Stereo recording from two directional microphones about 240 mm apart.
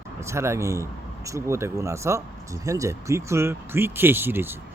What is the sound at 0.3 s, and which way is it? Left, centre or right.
Speech, centre.